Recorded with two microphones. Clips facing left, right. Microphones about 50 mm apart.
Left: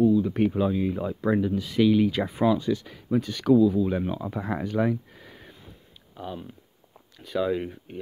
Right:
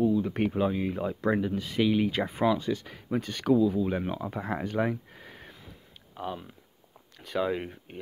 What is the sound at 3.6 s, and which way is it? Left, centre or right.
Speech, right.